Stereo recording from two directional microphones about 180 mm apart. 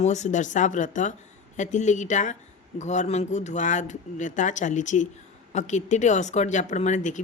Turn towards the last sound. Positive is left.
turn(degrees=45)  # may be behind; listen again after turning